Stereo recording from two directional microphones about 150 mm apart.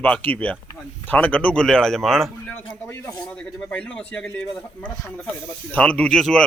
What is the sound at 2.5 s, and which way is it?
A man's voice, 15° left (ahead or behind).